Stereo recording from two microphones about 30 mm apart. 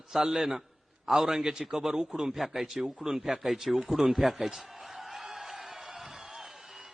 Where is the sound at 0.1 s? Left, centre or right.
Centre.